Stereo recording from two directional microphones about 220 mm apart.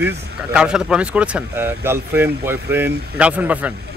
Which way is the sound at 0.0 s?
5° right (ahead or behind).